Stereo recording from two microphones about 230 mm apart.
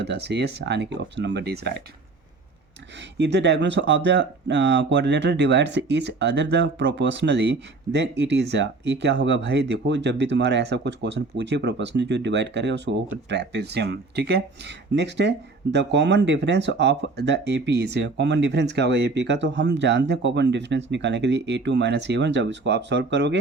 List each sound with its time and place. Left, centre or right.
0.0 s speech: right
3.2 s speech: right